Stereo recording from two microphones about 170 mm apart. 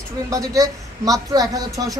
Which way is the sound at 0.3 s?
20° right (ahead or behind).